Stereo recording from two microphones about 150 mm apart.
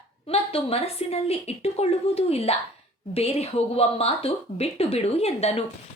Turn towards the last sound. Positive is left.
turn(degrees=45)  # may be behind; listen again after turning